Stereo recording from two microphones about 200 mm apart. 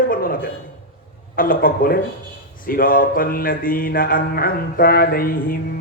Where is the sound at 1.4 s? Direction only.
45° left (ahead or behind).